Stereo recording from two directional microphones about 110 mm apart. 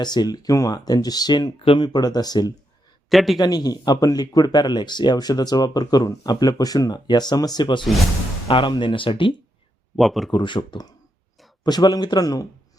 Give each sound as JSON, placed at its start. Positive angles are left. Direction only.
{"t": 0.0, "sound": "speech", "side_deg": 40}
{"t": 1.6, "sound": "speech", "side_deg": 55}
{"t": 1.9, "sound": "speech", "side_deg": 35}
{"t": 3.1, "sound": "speech", "side_deg": 0}
{"t": 3.3, "sound": "speech", "side_deg": 35}
{"t": 10.0, "sound": "speech", "side_deg": 0}
{"t": 10.3, "sound": "speech", "side_deg": 45}